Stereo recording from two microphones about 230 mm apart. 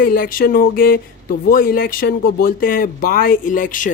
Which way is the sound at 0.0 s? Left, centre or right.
Left.